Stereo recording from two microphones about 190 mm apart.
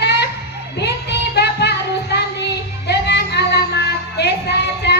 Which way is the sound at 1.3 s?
60° left (ahead or behind).